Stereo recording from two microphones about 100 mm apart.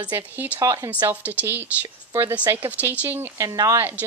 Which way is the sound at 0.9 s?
15° right (ahead or behind).